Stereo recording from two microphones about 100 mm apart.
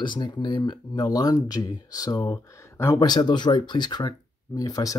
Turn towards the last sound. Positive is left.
turn(degrees=35)  # may be behind; listen again after turning